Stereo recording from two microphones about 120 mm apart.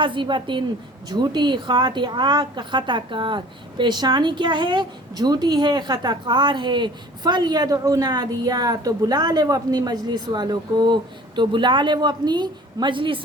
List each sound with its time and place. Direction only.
0.0 s a woman's voice: 45° right (ahead or behind)